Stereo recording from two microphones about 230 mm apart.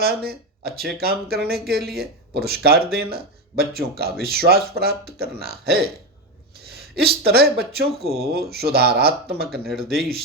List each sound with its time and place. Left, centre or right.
0.0 s speech: right
9.5 s speech: centre